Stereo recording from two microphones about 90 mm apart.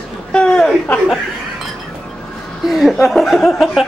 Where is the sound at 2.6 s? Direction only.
Centre (ahead or behind).